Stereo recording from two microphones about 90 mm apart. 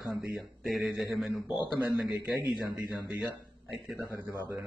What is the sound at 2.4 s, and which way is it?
Speech, 20° right (ahead or behind).